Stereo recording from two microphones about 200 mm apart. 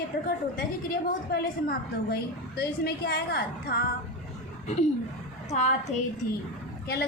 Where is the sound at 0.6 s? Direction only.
45° left (ahead or behind).